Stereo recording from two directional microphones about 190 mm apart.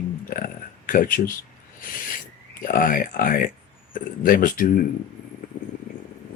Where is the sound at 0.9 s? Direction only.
45° left (ahead or behind).